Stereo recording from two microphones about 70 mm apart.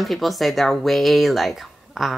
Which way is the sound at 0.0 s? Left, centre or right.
Centre.